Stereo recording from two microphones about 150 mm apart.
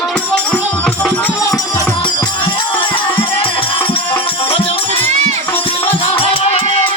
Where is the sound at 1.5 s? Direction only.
25° left (ahead or behind).